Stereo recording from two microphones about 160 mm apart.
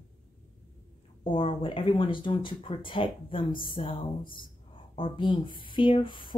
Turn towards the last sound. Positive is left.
turn(degrees=30)  # may be behind; listen again after turning